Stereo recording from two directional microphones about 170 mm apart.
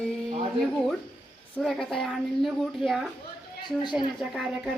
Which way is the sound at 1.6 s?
Centre (ahead or behind).